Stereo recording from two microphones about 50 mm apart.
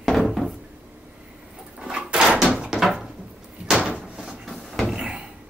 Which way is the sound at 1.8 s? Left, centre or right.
Centre.